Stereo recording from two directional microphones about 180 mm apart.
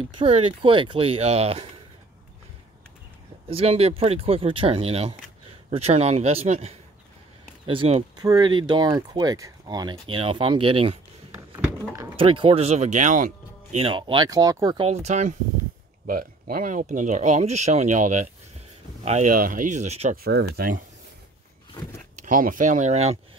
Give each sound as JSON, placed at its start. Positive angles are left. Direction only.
{"t": 0.0, "sound": "speech", "side_deg": -30}
{"t": 3.4, "sound": "speech", "side_deg": -35}
{"t": 11.3, "sound": "a sound", "side_deg": -15}
{"t": 12.2, "sound": "speech", "side_deg": -30}
{"t": 14.9, "sound": "speech", "side_deg": -40}
{"t": 16.1, "sound": "speech", "side_deg": -55}
{"t": 20.2, "sound": "speech", "side_deg": -60}
{"t": 22.2, "sound": "speech", "side_deg": -50}